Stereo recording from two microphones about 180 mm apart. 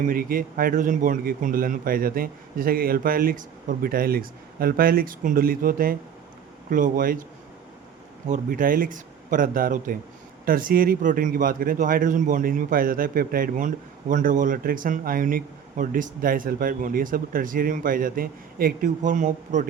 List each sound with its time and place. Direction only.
0.1 s speech: 50° right (ahead or behind)
8.3 s speech: 50° right (ahead or behind)